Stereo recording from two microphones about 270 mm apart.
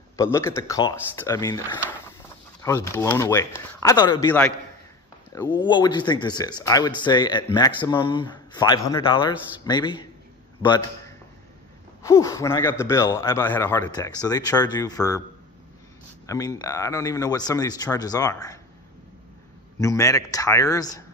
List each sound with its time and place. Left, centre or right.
0.1 s a man's voice: centre
16.3 s speech: centre
19.8 s speech: centre